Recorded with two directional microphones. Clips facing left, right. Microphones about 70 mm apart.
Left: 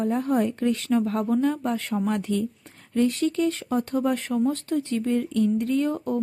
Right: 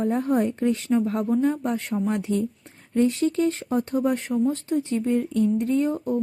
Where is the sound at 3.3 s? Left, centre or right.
Right.